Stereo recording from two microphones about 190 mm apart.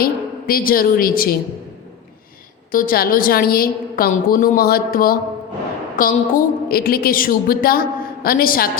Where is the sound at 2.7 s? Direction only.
45° left (ahead or behind).